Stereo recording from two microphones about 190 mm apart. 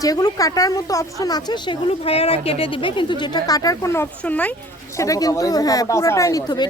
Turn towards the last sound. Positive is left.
turn(degrees=20)  # may be behind; listen again after turning